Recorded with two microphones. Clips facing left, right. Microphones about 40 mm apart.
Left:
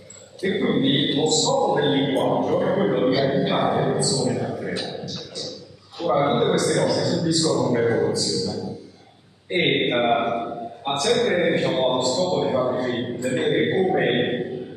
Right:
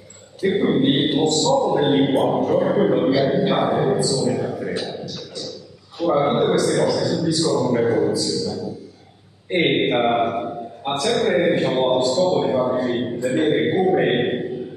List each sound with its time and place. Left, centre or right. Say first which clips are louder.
0.4 s a man's voice: right 3 dB; centre
5.9 s a man's voice: right 2 dB; centre